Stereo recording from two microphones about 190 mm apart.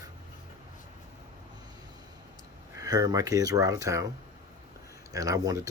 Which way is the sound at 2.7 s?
20° right (ahead or behind).